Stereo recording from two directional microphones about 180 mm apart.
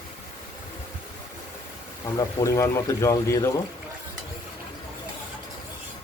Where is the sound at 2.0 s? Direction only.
20° left (ahead or behind).